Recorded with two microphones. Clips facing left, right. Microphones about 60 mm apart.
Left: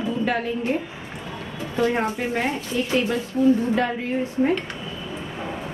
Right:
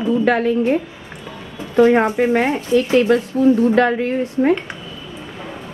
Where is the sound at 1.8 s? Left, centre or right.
Right.